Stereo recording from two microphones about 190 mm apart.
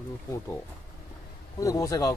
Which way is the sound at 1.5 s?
15° left (ahead or behind).